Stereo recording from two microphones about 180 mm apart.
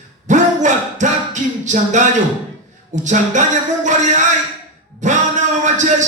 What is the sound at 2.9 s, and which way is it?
A man's voice, 45° right (ahead or behind).